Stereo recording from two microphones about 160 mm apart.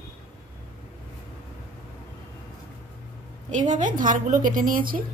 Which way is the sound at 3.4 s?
50° right (ahead or behind).